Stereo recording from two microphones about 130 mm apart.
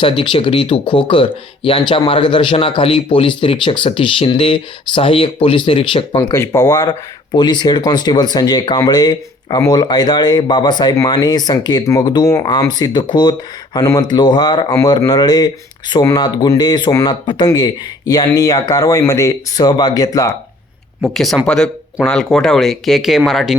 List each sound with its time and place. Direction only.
0.0 s speech: 40° left (ahead or behind)
6.1 s speech: 25° left (ahead or behind)
21.0 s speech: centre (ahead or behind)